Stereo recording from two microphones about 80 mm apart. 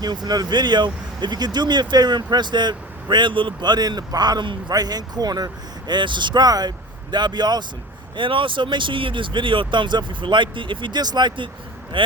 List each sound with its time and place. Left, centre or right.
0.0 s speech: right
5.9 s speech: right
8.1 s speech: right
11.9 s speech: right